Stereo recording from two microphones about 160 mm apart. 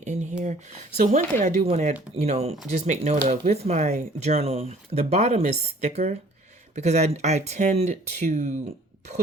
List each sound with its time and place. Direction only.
0.0 s speech: 50° right (ahead or behind)